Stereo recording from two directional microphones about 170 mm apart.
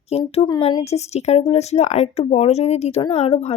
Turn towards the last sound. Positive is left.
turn(degrees=40)  # may be behind; listen again after turning